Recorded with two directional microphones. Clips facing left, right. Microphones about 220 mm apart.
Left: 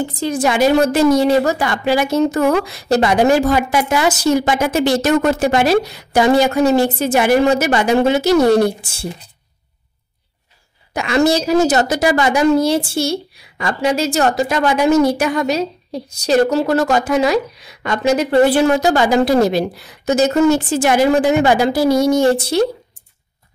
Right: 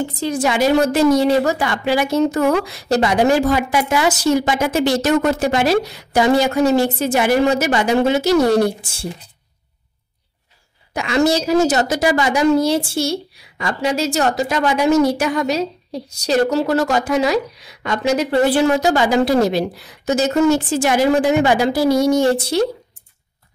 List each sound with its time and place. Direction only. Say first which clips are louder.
0.2 s a woman's voice: left 3 dB; 45° left (ahead or behind)
2.9 s a woman's voice: left 2 dB; 55° left (ahead or behind)
10.9 s a woman's voice: left 2 dB; 55° left (ahead or behind)